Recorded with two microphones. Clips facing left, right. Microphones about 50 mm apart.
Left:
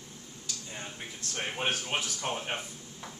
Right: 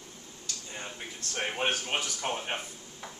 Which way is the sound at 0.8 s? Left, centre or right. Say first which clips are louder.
Right 1 dB; centre.